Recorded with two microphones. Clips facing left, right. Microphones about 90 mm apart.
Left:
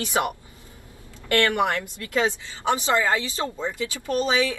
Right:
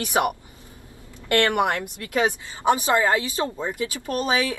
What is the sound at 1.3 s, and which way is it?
Speech, 20° right (ahead or behind).